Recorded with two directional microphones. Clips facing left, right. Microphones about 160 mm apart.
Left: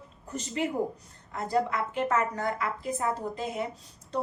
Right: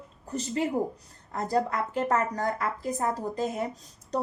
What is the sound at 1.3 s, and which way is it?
Speech, 40° right (ahead or behind).